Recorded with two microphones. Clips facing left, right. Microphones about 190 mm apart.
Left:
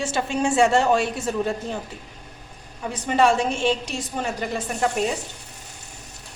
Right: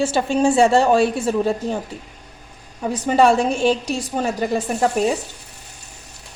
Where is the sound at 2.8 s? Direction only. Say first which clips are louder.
Right 4 dB; 35° right (ahead or behind).